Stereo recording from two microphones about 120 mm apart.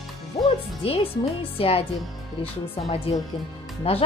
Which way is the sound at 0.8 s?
55° left (ahead or behind).